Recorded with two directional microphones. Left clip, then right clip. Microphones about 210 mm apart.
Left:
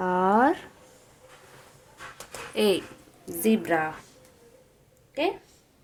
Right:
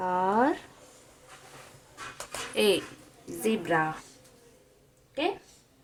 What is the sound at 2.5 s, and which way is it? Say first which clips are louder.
Speech: left 1 dB; 20° left (ahead or behind).